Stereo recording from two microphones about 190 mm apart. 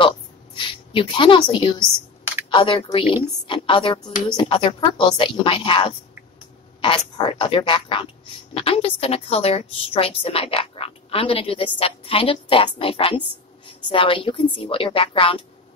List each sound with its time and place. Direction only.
0.6 s a woman's voice: 25° left (ahead or behind)